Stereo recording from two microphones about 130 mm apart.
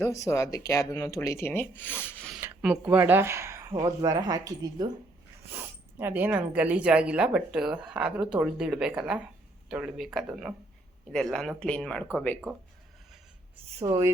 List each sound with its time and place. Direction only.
0.0 s speech: 20° left (ahead or behind)
2.6 s speech: 10° right (ahead or behind); by 4.9 s 25° right (ahead or behind)
6.0 s speech: 15° right (ahead or behind); by 12.0 s 5° left (ahead or behind)